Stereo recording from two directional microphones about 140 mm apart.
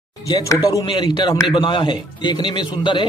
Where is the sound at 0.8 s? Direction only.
35° left (ahead or behind).